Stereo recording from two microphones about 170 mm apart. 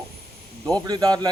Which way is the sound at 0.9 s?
25° right (ahead or behind).